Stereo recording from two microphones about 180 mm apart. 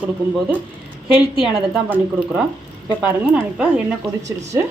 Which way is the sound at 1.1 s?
Centre (ahead or behind).